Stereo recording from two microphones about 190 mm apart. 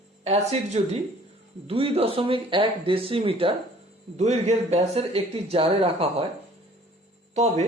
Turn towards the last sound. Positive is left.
turn(degrees=-35)  # may be behind; listen again after turning